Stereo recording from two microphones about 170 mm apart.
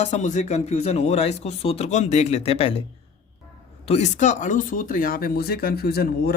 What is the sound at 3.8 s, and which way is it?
Speech, 40° left (ahead or behind).